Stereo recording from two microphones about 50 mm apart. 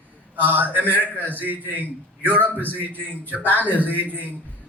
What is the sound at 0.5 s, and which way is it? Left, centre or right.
Speech, right.